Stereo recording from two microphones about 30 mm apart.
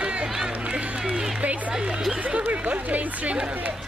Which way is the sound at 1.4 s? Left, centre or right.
Right.